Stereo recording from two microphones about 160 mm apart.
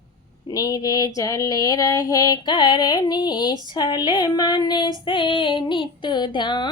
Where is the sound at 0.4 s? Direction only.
25° left (ahead or behind).